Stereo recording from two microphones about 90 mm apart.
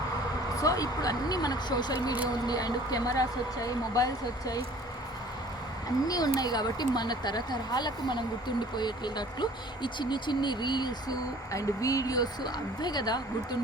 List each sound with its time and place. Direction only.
0.6 s speech: 45° left (ahead or behind)
6.1 s speech: 45° left (ahead or behind)
11.5 s speech: 40° left (ahead or behind)